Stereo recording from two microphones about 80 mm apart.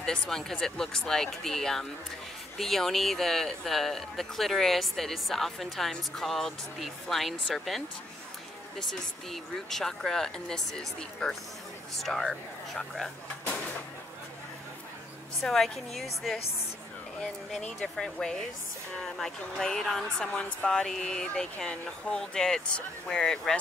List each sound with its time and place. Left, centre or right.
0.0 s speech: centre
9.3 s speech: centre
15.4 s speech: centre
17.5 s speech: centre